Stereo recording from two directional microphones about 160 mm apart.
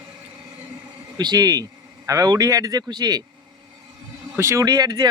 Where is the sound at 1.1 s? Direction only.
25° right (ahead or behind).